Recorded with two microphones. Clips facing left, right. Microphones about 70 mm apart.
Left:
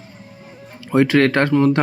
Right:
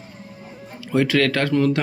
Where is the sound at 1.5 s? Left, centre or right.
Left.